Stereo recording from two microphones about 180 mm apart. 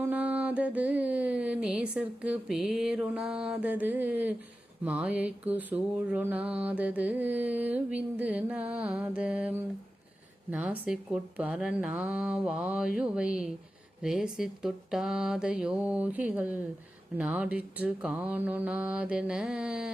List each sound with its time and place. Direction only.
0.0 s mantra: 10° right (ahead or behind)